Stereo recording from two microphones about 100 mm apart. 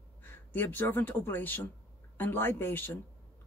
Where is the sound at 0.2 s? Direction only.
20° left (ahead or behind).